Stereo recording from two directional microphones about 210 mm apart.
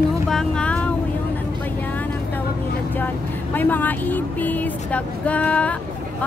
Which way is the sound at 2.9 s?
10° left (ahead or behind).